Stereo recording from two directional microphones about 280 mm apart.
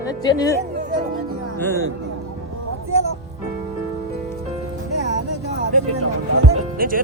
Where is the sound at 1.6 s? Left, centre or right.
Centre.